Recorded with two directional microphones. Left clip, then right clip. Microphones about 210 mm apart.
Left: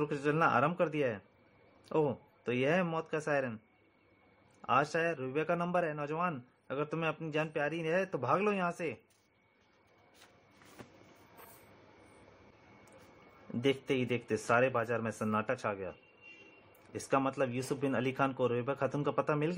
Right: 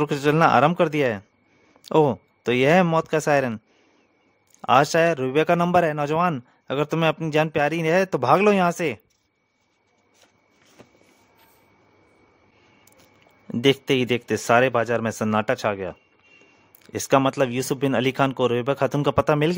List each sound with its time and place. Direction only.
0.0 s speech: 50° right (ahead or behind)
13.5 s speech: 55° right (ahead or behind)